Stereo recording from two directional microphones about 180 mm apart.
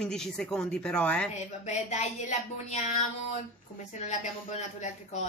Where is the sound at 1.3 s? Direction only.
40° left (ahead or behind).